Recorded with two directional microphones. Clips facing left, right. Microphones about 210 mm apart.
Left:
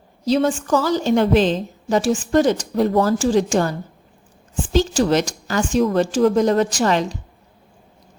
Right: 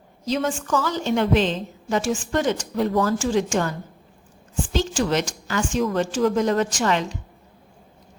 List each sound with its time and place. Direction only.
0.3 s a woman's voice: 35° left (ahead or behind)